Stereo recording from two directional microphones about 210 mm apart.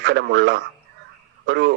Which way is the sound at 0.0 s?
50° right (ahead or behind).